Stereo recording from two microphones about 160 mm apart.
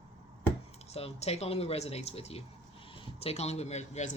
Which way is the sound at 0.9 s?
40° left (ahead or behind).